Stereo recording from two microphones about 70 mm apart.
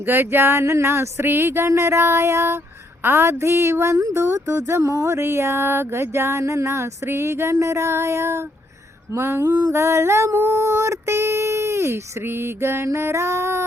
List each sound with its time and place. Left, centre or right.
0.1 s speech: right